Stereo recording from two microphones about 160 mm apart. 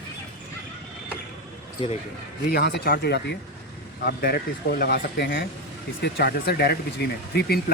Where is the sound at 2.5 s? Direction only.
75° left (ahead or behind); by 3.4 s 90° left.